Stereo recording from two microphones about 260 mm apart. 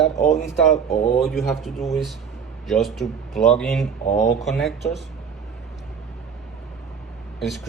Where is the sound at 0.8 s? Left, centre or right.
Left.